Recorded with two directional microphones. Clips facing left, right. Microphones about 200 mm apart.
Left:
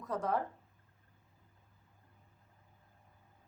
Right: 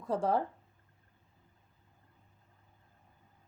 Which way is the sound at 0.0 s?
30° right (ahead or behind).